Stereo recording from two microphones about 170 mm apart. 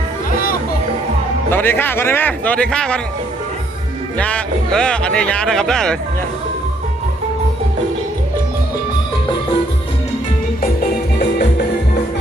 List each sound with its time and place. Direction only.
1.5 s a man's voice: 10° left (ahead or behind)
4.2 s speech: 5° left (ahead or behind)
10.6 s music: 65° left (ahead or behind)